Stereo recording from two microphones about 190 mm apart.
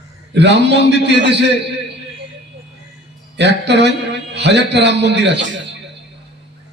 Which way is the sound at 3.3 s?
65° right (ahead or behind).